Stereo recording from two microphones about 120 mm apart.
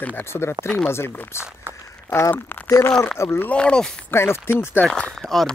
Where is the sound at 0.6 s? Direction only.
10° left (ahead or behind).